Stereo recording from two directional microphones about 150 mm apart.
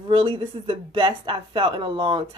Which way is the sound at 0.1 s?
35° right (ahead or behind).